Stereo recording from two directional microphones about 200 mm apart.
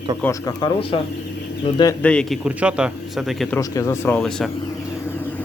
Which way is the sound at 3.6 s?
15° left (ahead or behind).